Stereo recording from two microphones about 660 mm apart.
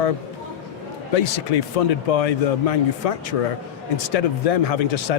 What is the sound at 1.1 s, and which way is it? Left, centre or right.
A man's voice, left.